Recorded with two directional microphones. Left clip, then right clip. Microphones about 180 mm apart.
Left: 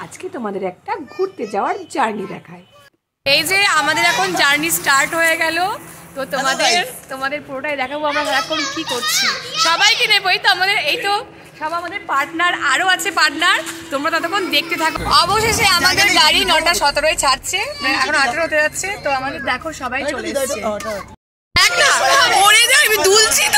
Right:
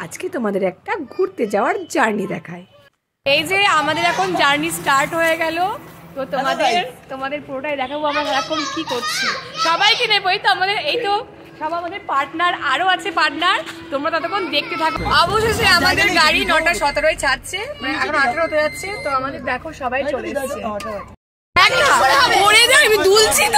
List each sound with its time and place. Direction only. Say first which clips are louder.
0.0 s a woman's voice: right 3 dB; 15° right (ahead or behind); by 8.5 s 10° left (ahead or behind)
9.0 s a child's voice: left 3 dB; 40° left (ahead or behind)
9.6 s a woman's voice: left 2 dB; centre (ahead or behind)
19.1 s speech: left 1 dB; 10° left (ahead or behind)
21.5 s a woman's voice: even; centre (ahead or behind)